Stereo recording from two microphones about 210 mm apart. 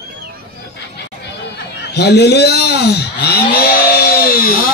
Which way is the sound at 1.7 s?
55° left (ahead or behind).